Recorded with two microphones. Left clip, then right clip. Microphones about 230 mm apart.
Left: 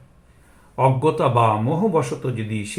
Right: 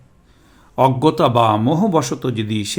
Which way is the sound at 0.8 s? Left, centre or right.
Right.